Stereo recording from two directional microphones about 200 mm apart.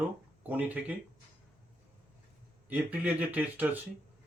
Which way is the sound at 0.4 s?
10° right (ahead or behind).